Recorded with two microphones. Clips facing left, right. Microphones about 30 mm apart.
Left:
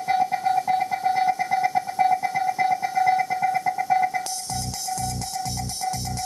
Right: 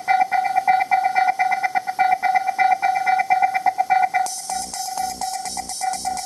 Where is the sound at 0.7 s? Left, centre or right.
Right.